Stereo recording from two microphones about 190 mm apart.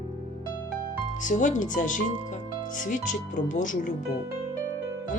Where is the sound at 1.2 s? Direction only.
40° left (ahead or behind).